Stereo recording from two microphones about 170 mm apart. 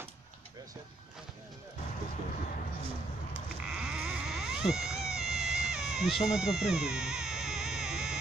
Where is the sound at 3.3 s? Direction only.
5° right (ahead or behind).